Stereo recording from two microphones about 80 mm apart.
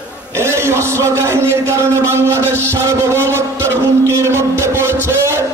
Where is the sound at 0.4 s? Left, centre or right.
Right.